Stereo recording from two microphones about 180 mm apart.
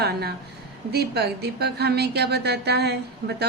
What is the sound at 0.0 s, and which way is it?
A woman's voice, 60° right (ahead or behind).